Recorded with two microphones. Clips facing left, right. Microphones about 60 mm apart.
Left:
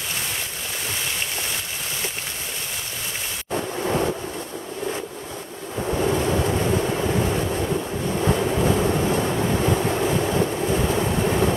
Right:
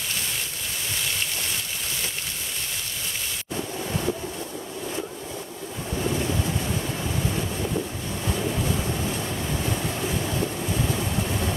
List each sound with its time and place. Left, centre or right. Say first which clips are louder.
3.5 s a sound: left 7 dB; left
5.8 s waves: left 6 dB; left
8.1 s vehicle: left 8 dB; left